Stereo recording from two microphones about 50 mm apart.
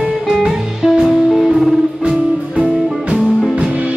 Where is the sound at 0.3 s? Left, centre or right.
Centre.